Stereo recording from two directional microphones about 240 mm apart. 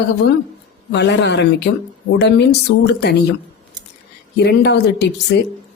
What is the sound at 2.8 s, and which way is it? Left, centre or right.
Speech, left.